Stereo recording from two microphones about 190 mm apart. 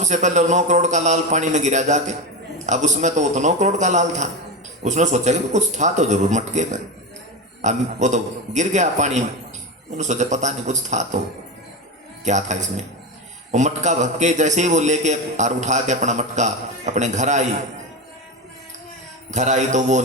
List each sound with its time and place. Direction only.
0.0 s a man's voice: 40° right (ahead or behind)
12.2 s a man's voice: 40° right (ahead or behind)
19.3 s a man's voice: 40° right (ahead or behind)